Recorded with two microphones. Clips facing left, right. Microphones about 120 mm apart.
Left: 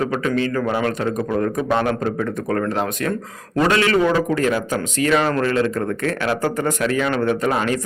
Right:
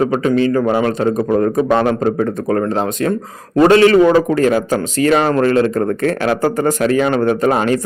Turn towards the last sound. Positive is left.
turn(degrees=-40)  # may be behind; listen again after turning